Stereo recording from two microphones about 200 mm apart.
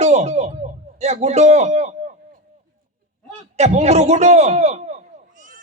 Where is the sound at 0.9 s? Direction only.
35° right (ahead or behind).